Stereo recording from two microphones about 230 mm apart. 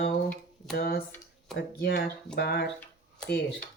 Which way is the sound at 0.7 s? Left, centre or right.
Left.